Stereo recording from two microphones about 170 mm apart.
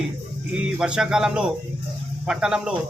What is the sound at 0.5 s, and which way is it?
Speech, 5° right (ahead or behind).